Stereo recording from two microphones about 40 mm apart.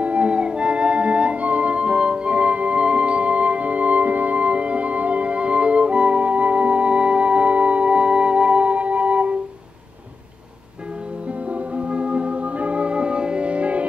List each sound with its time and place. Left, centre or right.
0.0 s music: right
11.5 s music: right